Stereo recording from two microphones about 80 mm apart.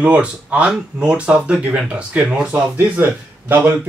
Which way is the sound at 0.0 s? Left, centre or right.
Centre.